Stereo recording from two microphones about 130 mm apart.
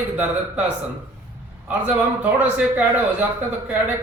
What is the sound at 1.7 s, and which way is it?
Speech, 10° right (ahead or behind).